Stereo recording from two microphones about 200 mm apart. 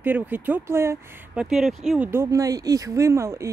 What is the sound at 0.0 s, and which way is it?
Speech, 10° right (ahead or behind).